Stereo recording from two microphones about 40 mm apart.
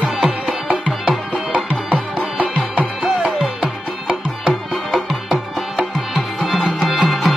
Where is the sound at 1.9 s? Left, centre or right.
Right.